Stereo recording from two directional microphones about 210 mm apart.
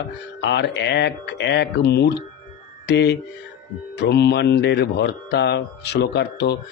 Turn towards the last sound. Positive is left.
turn(degrees=50)  # may be behind; listen again after turning